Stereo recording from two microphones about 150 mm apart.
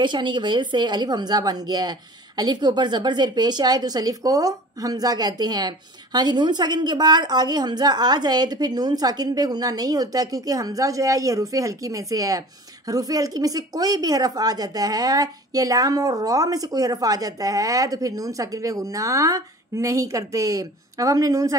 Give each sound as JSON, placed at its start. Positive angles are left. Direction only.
{"t": 0.0, "sound": "speech", "side_deg": -30}